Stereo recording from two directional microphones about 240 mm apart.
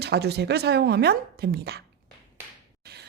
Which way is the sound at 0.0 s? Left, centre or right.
Right.